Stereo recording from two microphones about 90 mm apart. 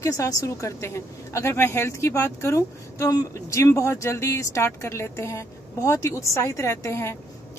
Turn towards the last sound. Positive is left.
turn(degrees=30)  # may be behind; listen again after turning